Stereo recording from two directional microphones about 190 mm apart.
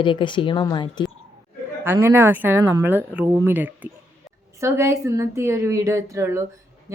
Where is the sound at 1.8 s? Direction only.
10° right (ahead or behind).